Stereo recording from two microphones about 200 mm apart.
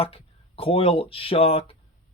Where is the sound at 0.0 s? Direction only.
30° left (ahead or behind).